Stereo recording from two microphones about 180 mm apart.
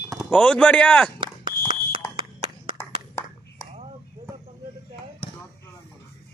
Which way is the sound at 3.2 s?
15° left (ahead or behind).